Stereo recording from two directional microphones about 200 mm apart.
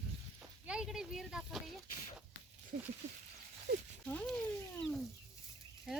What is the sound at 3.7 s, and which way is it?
Speech, 60° right (ahead or behind).